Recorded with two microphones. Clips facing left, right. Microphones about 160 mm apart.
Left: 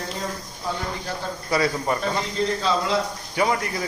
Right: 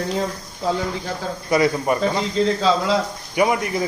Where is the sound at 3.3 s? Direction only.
20° right (ahead or behind).